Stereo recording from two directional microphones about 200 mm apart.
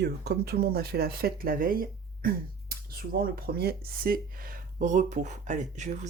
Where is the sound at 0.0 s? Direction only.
55° right (ahead or behind).